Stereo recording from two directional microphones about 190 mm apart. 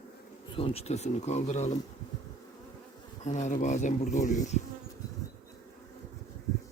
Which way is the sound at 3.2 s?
40° left (ahead or behind).